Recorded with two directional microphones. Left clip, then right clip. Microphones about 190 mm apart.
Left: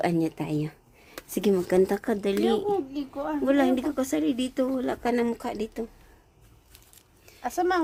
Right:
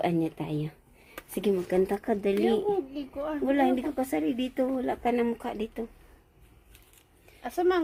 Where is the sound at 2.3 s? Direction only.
45° left (ahead or behind).